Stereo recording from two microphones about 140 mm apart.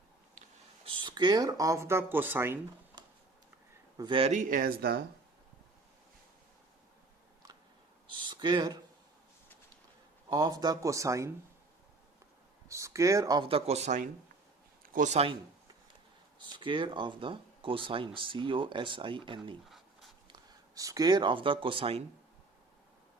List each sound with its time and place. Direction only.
0.9 s speech: 30° right (ahead or behind); by 2.6 s 15° right (ahead or behind)
3.0 s a sound: 35° right (ahead or behind)
3.9 s speech: 35° right (ahead or behind)
4.3 s speech: 70° right (ahead or behind); by 4.9 s 85° right
8.1 s a sound: 35° right (ahead or behind)
10.2 s speech: 30° right (ahead or behind)
12.6 s a sound: 20° right (ahead or behind)
13.4 s speech: 40° right (ahead or behind)
16.5 s speech: 35° right (ahead or behind)
19.6 s writing: centre (ahead or behind)
20.2 s speech: 30° right (ahead or behind)